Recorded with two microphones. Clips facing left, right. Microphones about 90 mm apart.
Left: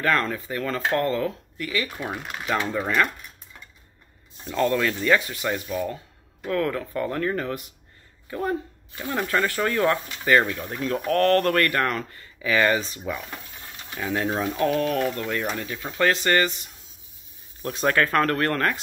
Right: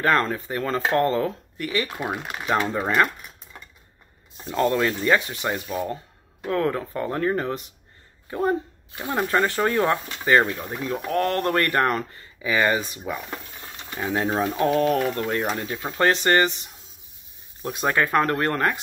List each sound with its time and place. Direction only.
0.0 s speech: 30° right (ahead or behind)
2.0 s speech: 15° right (ahead or behind)
4.5 s speech: 20° right (ahead or behind)
10.6 s speech: 10° right (ahead or behind)
14.6 s speech: 30° right (ahead or behind)
17.6 s speech: 15° right (ahead or behind)